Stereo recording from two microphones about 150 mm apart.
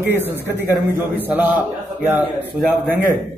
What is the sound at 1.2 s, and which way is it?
Speech, 10° right (ahead or behind).